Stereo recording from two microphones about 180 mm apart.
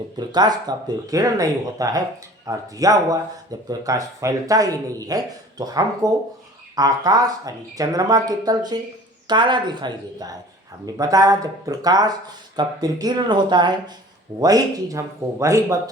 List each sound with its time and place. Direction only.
0.2 s speech: 25° right (ahead or behind)